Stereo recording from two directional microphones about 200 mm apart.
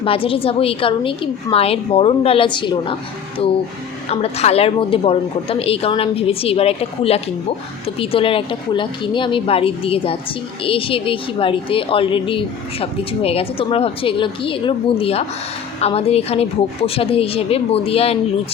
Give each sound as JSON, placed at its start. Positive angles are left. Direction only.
{"t": 0.0, "sound": "a woman's voice", "side_deg": 25}
{"t": 4.1, "sound": "a woman's voice", "side_deg": 30}